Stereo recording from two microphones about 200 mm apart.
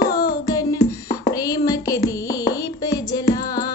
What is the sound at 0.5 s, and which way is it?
Music, 15° left (ahead or behind).